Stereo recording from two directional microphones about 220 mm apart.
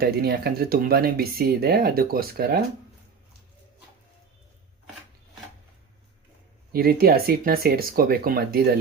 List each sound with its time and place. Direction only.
0.0 s speech: 45° right (ahead or behind)
6.7 s speech: 45° right (ahead or behind)